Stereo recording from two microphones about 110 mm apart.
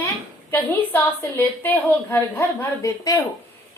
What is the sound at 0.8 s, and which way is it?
A woman's voice, 20° left (ahead or behind).